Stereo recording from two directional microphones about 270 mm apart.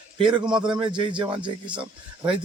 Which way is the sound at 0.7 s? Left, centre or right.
Centre.